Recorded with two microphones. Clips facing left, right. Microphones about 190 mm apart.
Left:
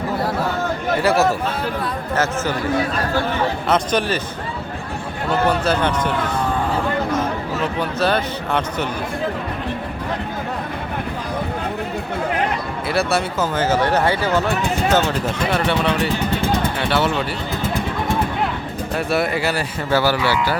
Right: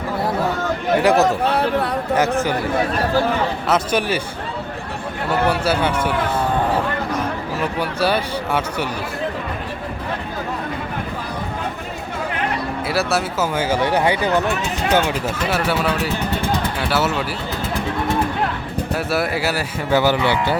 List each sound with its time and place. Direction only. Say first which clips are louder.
1.0 s speech: right 1 dB; 20° right (ahead or behind)
1.5 s speech: right 5 dB; 65° right (ahead or behind)
3.7 s speech: even; 10° right (ahead or behind)
5.3 s speech: left 1 dB; 10° right (ahead or behind)
7.6 s speech: even; 10° right (ahead or behind)
12.9 s speech: left 2 dB; centre (ahead or behind)
18.9 s speech: left 2 dB; 5° right (ahead or behind)
19.9 s speech: right 1 dB; 20° right (ahead or behind)